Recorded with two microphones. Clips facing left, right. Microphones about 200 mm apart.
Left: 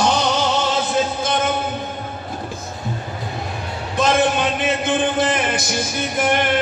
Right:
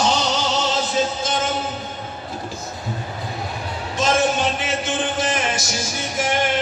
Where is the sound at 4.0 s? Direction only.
55° left (ahead or behind).